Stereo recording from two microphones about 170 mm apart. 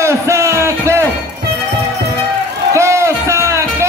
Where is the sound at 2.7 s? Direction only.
15° right (ahead or behind).